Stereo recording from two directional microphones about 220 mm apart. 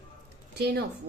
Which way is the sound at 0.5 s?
45° right (ahead or behind).